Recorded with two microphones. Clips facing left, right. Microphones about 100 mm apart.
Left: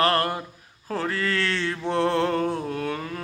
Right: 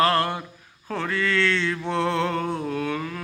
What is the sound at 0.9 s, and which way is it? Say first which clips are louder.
Mantra: right 1 dB; 35° left (ahead or behind).